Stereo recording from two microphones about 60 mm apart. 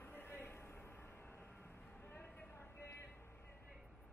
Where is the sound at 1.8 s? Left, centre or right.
Left.